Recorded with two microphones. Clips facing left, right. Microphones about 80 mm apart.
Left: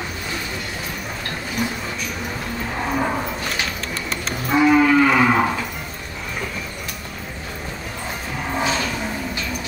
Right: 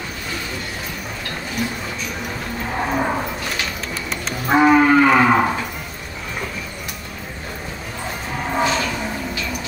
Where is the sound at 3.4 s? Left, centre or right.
Centre.